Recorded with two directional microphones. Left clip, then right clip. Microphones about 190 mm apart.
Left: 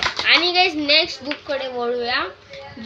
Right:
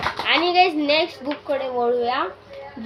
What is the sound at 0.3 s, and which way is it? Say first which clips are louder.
A woman's voice: left 1 dB; 15° left (ahead or behind).